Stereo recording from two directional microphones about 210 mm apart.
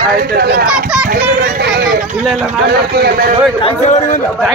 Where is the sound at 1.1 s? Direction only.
45° right (ahead or behind).